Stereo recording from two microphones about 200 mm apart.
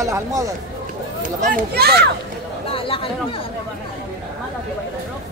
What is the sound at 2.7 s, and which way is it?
Speech, 25° left (ahead or behind).